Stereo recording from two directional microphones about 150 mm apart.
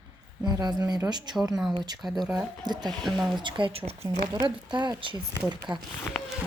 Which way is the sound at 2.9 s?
Centre (ahead or behind).